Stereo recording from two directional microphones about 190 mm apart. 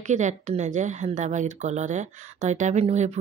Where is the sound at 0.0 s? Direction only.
40° right (ahead or behind).